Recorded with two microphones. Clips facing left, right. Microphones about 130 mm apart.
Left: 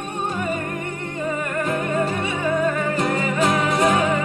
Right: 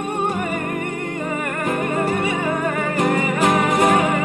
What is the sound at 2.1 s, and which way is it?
Music, 60° right (ahead or behind).